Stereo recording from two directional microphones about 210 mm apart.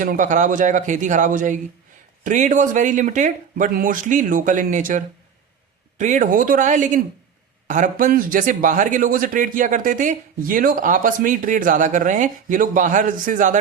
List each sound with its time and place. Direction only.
0.0 s a man's voice: 40° right (ahead or behind)